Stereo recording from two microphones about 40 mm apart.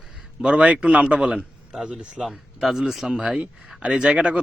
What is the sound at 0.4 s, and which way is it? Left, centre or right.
A man's voice, right.